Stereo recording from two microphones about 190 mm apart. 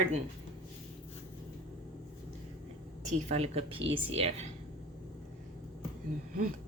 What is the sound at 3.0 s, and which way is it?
Speech, 35° right (ahead or behind).